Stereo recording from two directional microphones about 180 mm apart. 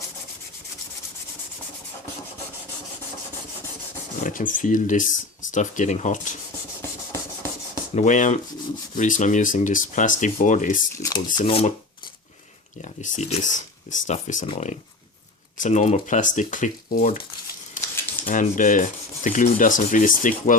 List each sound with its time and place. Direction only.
4.2 s speech: 50° left (ahead or behind)
7.9 s speech: 45° left (ahead or behind)
11.0 s speech: 25° left (ahead or behind)
12.8 s speech: 40° left (ahead or behind)
17.8 s typewriter: 45° left (ahead or behind)
18.3 s speech: 45° left (ahead or behind)